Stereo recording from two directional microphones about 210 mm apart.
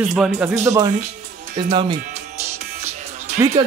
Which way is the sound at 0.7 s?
15° right (ahead or behind).